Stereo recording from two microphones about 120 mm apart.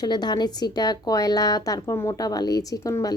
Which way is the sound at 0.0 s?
35° left (ahead or behind).